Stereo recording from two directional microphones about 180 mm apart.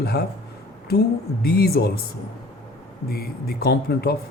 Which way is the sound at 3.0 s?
60° left (ahead or behind).